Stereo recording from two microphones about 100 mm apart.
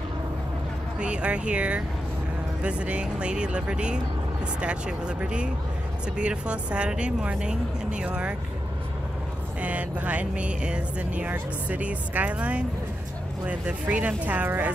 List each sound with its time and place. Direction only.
0.9 s speech: 10° right (ahead or behind)
9.6 s speech: 15° right (ahead or behind)